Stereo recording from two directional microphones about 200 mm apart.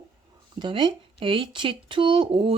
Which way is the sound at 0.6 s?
25° right (ahead or behind).